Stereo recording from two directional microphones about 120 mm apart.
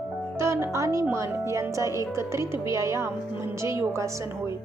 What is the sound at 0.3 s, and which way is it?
Speech, 20° right (ahead or behind).